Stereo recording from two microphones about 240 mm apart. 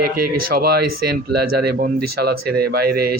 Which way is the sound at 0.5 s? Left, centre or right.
Right.